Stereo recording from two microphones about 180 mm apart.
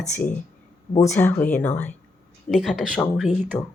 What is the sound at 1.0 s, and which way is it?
Speech, 10° left (ahead or behind).